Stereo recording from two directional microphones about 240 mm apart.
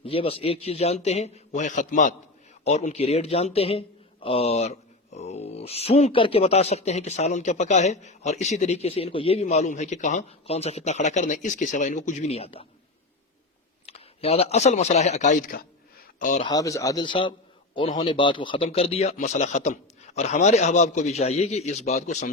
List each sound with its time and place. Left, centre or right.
0.0 s a man's voice: left
13.8 s a man's voice: left
16.5 s speech: centre; by 22.3 s left